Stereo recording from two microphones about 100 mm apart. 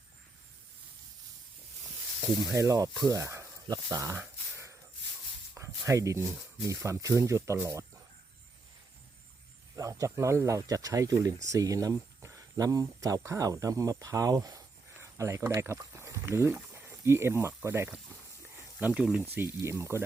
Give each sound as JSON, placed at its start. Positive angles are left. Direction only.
{"t": 2.5, "sound": "speech", "side_deg": -30}
{"t": 5.5, "sound": "a sound", "side_deg": -30}
{"t": 6.7, "sound": "speech", "side_deg": -30}
{"t": 9.7, "sound": "speech", "side_deg": -35}